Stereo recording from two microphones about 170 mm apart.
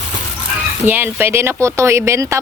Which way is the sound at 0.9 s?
10° right (ahead or behind).